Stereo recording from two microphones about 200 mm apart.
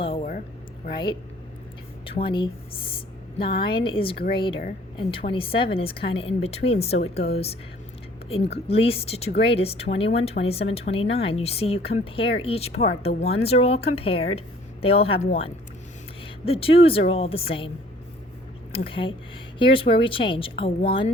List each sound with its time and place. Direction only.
0.0 s a sound: 30° left (ahead or behind)
2.0 s speech: 25° left (ahead or behind)
8.3 s speech: 30° left (ahead or behind)
18.7 s speech: 30° left (ahead or behind)